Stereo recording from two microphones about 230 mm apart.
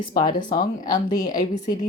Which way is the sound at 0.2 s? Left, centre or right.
Left.